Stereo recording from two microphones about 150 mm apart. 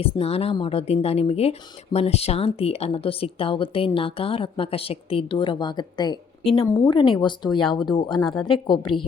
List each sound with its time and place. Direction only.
0.0 s a woman's voice: 40° left (ahead or behind)
6.7 s speech: 15° left (ahead or behind)
6.9 s speech: 35° left (ahead or behind)